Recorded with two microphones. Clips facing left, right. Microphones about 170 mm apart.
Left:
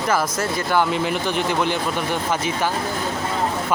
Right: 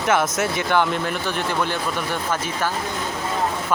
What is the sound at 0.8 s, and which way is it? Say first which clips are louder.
Speech: left 2 dB; 10° left (ahead or behind).